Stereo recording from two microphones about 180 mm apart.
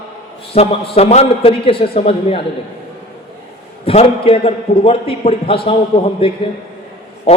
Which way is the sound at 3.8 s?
35° left (ahead or behind).